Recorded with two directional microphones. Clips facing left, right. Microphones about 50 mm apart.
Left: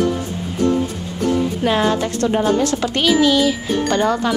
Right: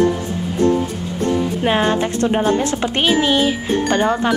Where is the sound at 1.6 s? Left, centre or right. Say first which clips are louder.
Right 1 dB; right.